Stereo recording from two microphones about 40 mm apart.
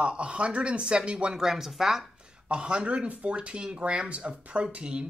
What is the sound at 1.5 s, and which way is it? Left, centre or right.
Speech, centre.